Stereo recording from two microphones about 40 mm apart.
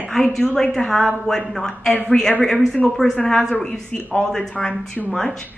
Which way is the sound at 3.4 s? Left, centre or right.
Centre.